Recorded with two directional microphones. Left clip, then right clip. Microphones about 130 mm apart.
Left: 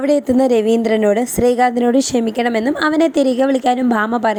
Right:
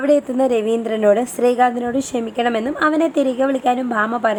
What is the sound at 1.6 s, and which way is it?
A woman's voice, 45° left (ahead or behind).